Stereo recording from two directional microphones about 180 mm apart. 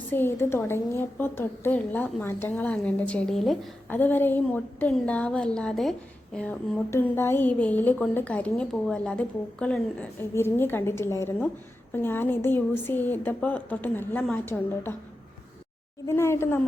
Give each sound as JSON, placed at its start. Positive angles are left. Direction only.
{"t": 0.1, "sound": "a woman's voice", "side_deg": 10}
{"t": 16.0, "sound": "a woman's voice", "side_deg": 15}